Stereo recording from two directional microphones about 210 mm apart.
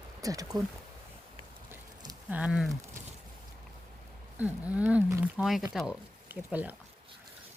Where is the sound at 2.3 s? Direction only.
5° right (ahead or behind).